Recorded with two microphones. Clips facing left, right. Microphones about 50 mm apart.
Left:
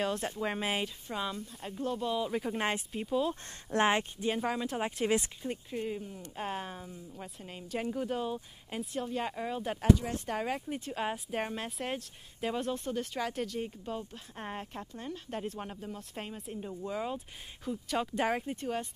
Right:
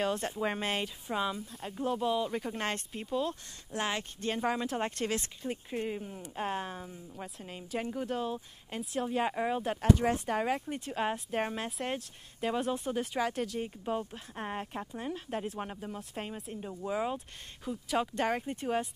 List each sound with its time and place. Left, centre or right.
0.0 s speech: centre
1.0 s speech: centre
3.7 s speech: left
4.4 s speech: centre
5.7 s speech: centre
6.3 s speech: centre
9.0 s speech: centre
9.6 s speech: centre
13.8 s speech: centre
16.0 s speech: centre